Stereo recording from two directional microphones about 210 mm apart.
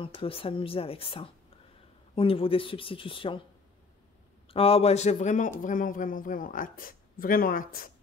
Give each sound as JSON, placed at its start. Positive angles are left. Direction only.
{"t": 0.0, "sound": "speech", "side_deg": 25}
{"t": 4.5, "sound": "speech", "side_deg": 25}